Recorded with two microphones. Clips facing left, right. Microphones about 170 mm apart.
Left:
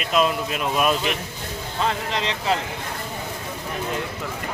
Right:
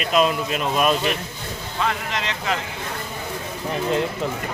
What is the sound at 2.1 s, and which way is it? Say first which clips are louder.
Speech: left 2 dB; 30° left (ahead or behind).